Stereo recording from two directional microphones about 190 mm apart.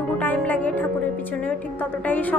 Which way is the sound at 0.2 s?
10° left (ahead or behind).